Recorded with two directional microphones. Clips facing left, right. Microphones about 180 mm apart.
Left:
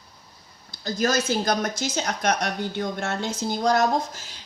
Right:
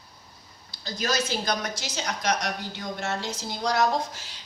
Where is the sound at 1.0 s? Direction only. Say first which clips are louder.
Left 5 dB; 45° left (ahead or behind).